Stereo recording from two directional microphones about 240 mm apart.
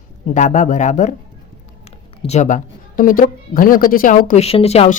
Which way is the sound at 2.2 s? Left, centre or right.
Left.